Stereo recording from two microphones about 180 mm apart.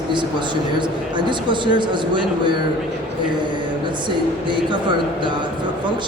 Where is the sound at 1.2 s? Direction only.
25° right (ahead or behind).